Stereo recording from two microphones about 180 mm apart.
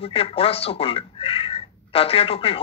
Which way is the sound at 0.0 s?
30° left (ahead or behind).